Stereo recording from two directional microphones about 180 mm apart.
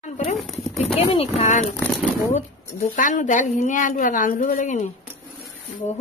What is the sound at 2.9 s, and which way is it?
A woman's voice, 45° left (ahead or behind).